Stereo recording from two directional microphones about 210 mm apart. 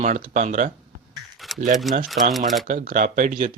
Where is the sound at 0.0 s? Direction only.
35° right (ahead or behind).